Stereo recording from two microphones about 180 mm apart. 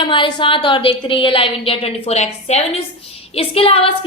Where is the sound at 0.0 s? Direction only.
25° left (ahead or behind).